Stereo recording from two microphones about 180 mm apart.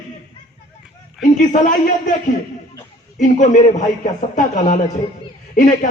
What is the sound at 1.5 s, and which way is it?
Speech, 45° left (ahead or behind).